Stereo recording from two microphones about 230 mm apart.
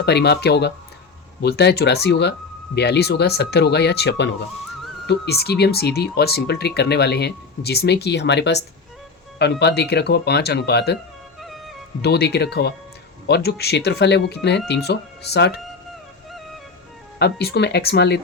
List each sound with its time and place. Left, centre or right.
0.0 s speech: left
11.3 s music: centre
12.0 s speech: left
17.2 s speech: left